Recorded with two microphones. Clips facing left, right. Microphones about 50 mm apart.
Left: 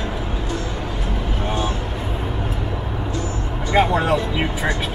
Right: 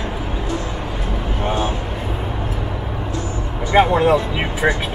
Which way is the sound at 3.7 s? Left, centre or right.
Centre.